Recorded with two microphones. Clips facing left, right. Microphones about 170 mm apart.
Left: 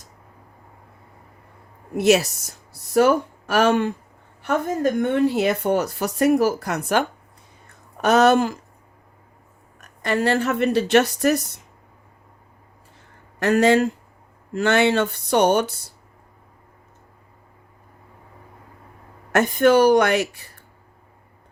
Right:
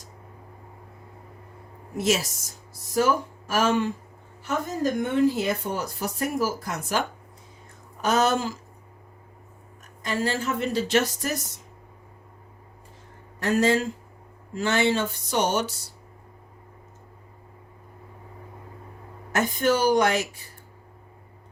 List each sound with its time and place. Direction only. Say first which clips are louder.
2.0 s speech: left 8 dB; 65° left (ahead or behind)
8.0 s speech: left 7 dB; 65° left (ahead or behind)
9.8 s speech: left 6 dB; 65° left (ahead or behind)
13.4 s speech: left 5 dB; 70° left (ahead or behind); by 15.9 s 55° left (ahead or behind)
19.3 s speech: left 7 dB; 65° left (ahead or behind)